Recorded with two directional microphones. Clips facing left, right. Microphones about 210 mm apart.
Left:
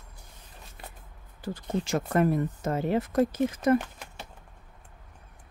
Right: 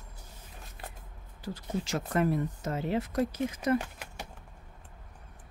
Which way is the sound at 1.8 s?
50° left (ahead or behind).